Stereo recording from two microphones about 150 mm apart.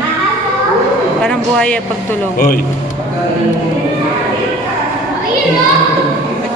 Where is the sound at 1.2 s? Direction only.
5° left (ahead or behind).